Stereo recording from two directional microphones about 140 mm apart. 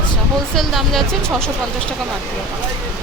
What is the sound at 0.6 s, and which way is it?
Speech, centre (ahead or behind).